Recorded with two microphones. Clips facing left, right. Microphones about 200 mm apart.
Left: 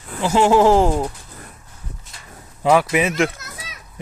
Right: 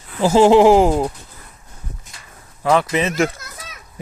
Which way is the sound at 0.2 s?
35° right (ahead or behind).